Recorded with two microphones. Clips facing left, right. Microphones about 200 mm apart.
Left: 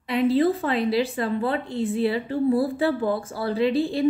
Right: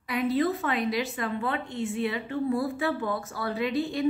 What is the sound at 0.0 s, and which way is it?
Speech, 25° left (ahead or behind).